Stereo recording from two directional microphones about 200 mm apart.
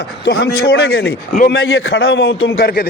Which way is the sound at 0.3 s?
50° left (ahead or behind).